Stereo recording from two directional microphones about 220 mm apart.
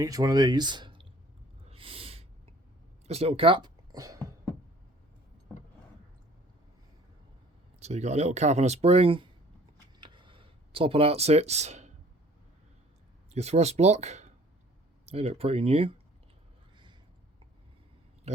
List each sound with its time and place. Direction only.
0.0 s speech: 15° right (ahead or behind)
1.7 s snort: 25° right (ahead or behind)
3.1 s speech: 25° right (ahead or behind)
7.8 s speech: 30° right (ahead or behind)
10.0 s a sound: 20° right (ahead or behind)
13.3 s speech: 30° right (ahead or behind)